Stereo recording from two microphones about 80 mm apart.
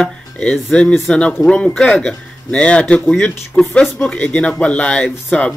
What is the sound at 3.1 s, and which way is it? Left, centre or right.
Speech, left.